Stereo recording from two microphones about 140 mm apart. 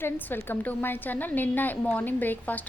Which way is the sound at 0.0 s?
15° left (ahead or behind).